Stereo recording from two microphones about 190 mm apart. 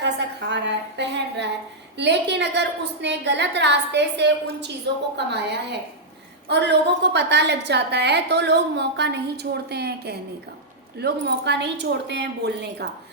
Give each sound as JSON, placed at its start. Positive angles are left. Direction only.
{"t": 0.0, "sound": "a woman's voice", "side_deg": -65}